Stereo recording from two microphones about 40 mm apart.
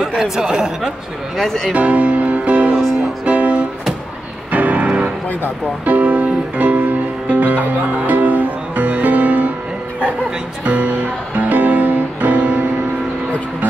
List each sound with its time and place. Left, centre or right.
0.2 s speech: centre
1.4 s speech: centre
1.7 s speech: right
3.3 s music: right
10.6 s speech: right
11.3 s music: right